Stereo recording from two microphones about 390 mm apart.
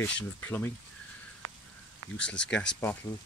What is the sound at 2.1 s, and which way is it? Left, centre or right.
Speech, centre.